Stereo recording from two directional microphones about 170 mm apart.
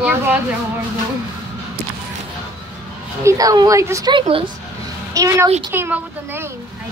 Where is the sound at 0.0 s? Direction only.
10° right (ahead or behind).